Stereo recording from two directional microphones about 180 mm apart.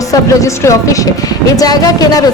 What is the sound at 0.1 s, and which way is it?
A woman's voice, 15° left (ahead or behind).